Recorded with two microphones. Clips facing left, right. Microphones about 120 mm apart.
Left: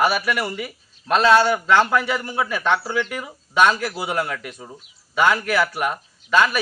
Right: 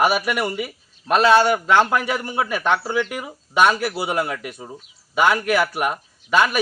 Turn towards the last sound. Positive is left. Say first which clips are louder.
# even
turn(degrees=-15)  # may be behind; listen again after turning